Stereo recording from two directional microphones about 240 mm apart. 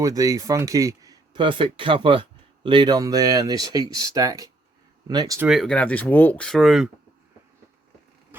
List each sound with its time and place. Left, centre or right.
0.0 s speech: centre
5.5 s speech: centre